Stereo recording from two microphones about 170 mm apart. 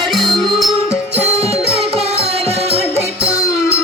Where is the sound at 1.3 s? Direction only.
35° right (ahead or behind).